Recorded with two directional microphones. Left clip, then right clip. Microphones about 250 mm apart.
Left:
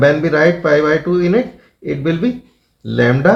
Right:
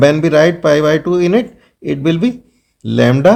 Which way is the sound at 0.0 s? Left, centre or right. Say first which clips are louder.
Right 2 dB; right.